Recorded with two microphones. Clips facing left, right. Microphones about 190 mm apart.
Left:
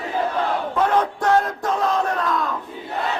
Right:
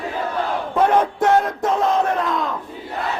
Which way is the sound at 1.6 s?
25° right (ahead or behind).